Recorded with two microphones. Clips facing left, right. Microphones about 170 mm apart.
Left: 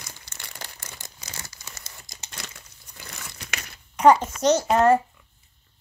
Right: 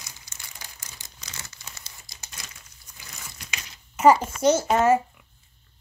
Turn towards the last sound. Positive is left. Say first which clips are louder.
# left 2 dB
turn(degrees=-5)  # may be behind; listen again after turning